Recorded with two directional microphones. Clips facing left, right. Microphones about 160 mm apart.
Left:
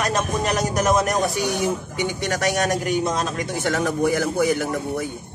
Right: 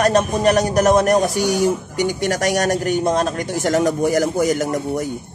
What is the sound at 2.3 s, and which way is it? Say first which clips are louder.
A man's voice: right 1 dB; 40° right (ahead or behind).